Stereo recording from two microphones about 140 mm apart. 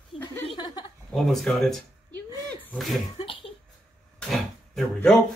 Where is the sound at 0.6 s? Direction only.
30° left (ahead or behind).